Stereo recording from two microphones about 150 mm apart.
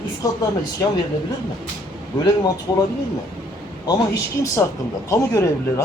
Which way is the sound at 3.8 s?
25° left (ahead or behind).